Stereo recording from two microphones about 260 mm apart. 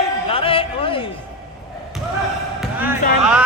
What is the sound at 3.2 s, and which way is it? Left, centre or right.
Music, centre.